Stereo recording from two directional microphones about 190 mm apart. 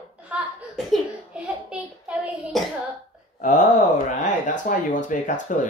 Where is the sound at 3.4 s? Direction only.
40° left (ahead or behind).